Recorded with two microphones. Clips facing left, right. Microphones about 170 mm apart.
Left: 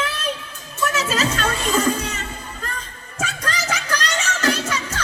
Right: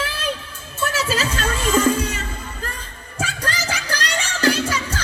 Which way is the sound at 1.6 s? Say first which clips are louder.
Right 4 dB; 35° left (ahead or behind).